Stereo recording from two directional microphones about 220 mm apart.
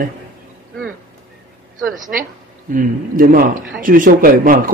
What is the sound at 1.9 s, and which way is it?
Speech, 40° right (ahead or behind).